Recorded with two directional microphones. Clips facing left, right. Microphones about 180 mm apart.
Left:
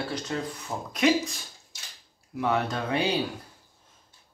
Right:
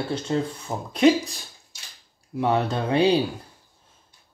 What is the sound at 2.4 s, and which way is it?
Speech, 30° right (ahead or behind).